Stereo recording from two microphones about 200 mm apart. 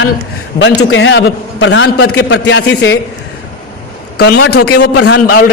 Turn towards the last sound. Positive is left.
turn(degrees=60)  # may be behind; listen again after turning